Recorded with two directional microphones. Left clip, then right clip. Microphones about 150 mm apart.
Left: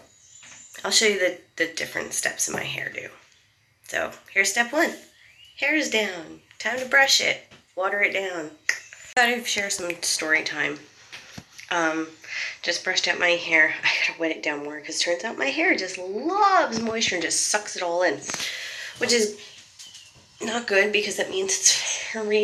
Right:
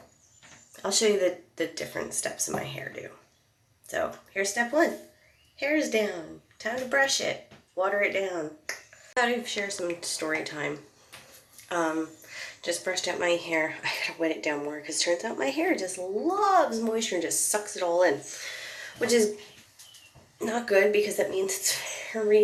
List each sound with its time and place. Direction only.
0.8 s a woman's voice: 10° right (ahead or behind)
11.7 s a woman's voice: 10° right (ahead or behind)
20.4 s a woman's voice: 10° right (ahead or behind)